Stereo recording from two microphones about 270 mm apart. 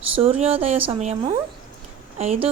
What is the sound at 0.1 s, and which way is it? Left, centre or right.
Speech, right.